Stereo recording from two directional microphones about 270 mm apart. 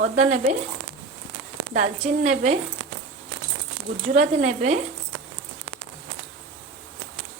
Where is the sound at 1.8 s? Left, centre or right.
Right.